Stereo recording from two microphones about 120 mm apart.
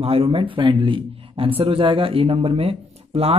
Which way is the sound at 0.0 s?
55° right (ahead or behind).